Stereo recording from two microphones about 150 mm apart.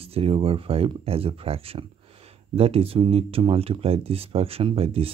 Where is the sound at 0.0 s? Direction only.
40° right (ahead or behind).